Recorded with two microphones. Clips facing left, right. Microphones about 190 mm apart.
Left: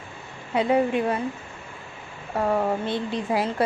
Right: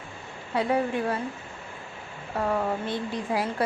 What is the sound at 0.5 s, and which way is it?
Speech, 20° left (ahead or behind).